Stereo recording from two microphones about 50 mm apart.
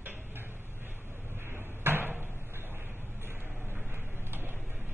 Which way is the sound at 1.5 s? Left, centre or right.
Right.